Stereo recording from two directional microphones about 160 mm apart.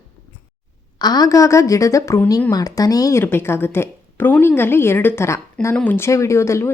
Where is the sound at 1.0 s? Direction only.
25° left (ahead or behind).